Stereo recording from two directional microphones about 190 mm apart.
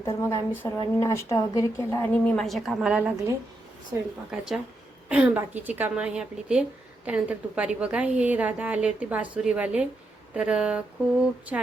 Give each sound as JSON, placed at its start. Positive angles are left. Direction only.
{"t": 0.0, "sound": "a woman's voice", "side_deg": 15}